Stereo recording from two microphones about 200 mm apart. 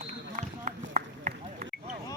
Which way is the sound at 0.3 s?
35° right (ahead or behind).